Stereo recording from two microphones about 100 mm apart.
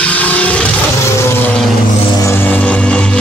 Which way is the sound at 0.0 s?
15° left (ahead or behind).